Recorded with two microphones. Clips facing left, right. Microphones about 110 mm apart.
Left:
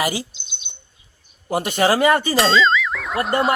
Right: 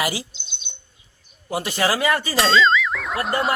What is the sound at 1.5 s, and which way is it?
Speech, 45° left (ahead or behind).